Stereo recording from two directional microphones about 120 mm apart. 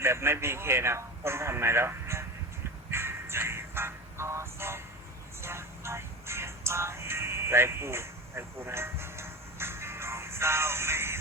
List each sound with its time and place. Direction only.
0.0 s speech: 20° right (ahead or behind)
2.9 s music: 20° right (ahead or behind)